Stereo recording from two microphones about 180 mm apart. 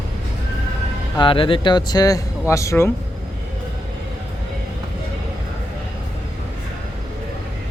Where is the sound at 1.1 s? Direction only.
25° left (ahead or behind).